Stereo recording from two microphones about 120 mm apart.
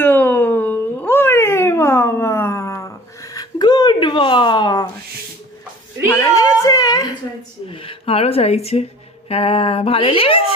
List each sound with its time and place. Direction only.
0.0 s cat: 15° left (ahead or behind); by 4.9 s 35° left (ahead or behind)
6.1 s a sound: 25° left (ahead or behind)
7.7 s speech: 50° left (ahead or behind)